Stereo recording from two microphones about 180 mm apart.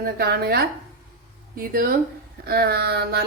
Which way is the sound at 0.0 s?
60° right (ahead or behind).